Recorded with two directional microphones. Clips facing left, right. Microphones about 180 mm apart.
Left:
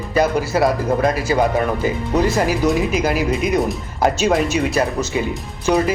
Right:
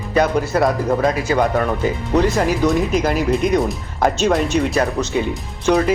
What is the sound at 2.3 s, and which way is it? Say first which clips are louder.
Speech: even; 5° left (ahead or behind).